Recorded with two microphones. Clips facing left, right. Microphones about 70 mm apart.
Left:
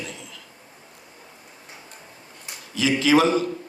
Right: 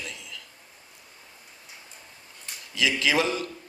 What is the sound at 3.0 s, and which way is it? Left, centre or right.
Speech, left.